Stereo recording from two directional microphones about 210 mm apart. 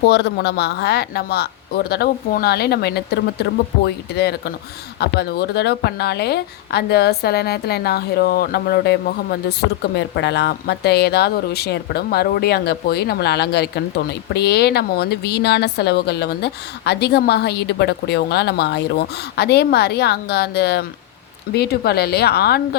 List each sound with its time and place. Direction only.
0.1 s speech: 55° left (ahead or behind)